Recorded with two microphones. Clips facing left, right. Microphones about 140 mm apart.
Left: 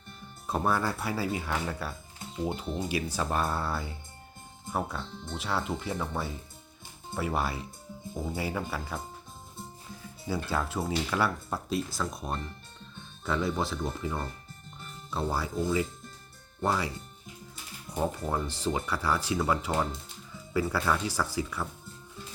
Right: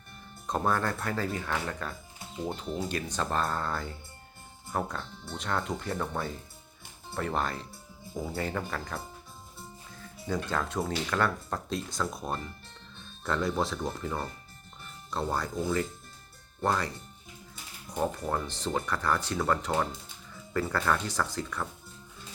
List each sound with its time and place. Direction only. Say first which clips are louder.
0.4 s speech: even; 5° left (ahead or behind)
10.0 s speech: right 1 dB; 5° left (ahead or behind)